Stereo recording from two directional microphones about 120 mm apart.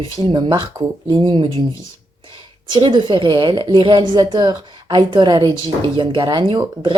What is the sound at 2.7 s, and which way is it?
Speech, 40° right (ahead or behind).